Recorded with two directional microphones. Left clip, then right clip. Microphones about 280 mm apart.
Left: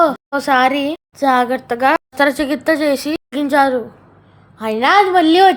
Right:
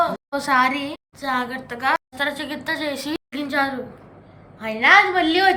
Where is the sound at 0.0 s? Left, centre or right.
Centre.